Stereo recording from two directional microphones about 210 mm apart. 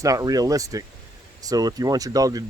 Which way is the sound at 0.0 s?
15° right (ahead or behind).